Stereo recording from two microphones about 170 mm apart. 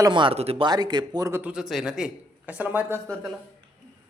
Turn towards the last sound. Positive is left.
turn(degrees=-15)  # may be behind; listen again after turning